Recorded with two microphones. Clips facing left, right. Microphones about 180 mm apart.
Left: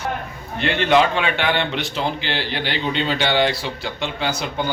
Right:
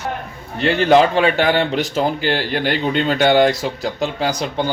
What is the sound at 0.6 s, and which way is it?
A man's voice, 40° right (ahead or behind).